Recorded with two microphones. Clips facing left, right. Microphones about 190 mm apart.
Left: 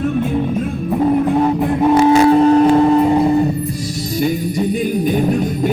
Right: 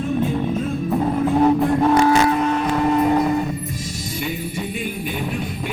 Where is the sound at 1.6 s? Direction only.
20° left (ahead or behind).